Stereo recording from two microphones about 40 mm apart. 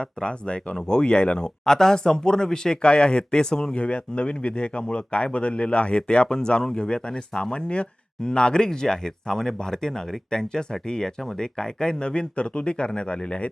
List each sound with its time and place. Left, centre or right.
0.0 s speech: left
1.6 s speech: centre